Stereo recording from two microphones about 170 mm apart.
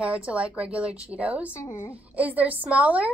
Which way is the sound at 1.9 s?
10° right (ahead or behind).